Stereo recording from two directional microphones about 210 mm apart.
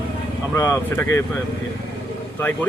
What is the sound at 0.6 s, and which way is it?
Speech, 10° left (ahead or behind).